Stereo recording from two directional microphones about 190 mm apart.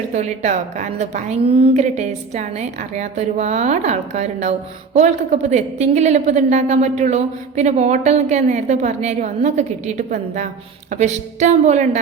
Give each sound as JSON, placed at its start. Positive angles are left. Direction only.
{"t": 0.1, "sound": "a woman's voice", "side_deg": -40}